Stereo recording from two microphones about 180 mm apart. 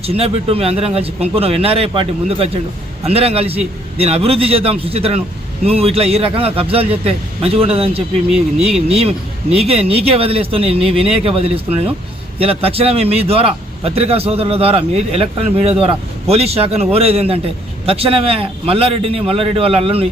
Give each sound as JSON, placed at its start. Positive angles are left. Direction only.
{"t": 0.0, "sound": "speech", "side_deg": -35}